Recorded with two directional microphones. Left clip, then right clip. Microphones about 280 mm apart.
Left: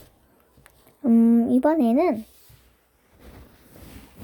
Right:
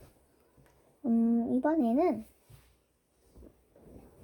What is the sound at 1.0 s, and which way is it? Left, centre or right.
Speech, centre.